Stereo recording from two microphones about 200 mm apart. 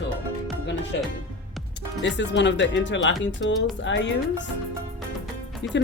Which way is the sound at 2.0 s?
65° left (ahead or behind).